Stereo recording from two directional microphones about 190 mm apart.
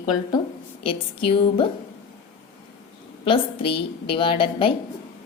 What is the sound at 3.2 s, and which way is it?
A woman's voice, 30° left (ahead or behind).